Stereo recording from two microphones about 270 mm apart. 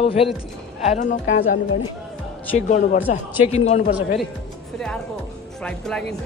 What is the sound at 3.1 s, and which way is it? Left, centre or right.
Speech, left.